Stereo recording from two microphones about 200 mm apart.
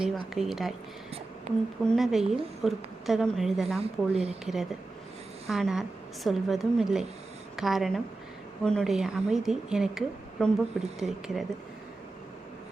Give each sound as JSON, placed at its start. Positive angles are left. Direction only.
{"t": 0.0, "sound": "a woman's voice", "side_deg": 0}
{"t": 1.5, "sound": "a woman's voice", "side_deg": -35}
{"t": 1.9, "sound": "a woman's voice", "side_deg": 0}